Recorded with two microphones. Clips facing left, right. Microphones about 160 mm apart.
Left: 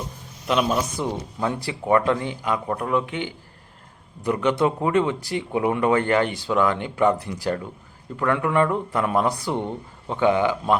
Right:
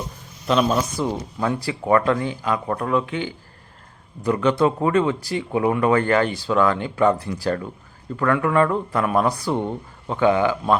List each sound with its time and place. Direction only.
0.4 s a man's voice: 10° left (ahead or behind)